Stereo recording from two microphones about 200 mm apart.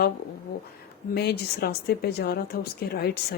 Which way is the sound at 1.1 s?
55° left (ahead or behind).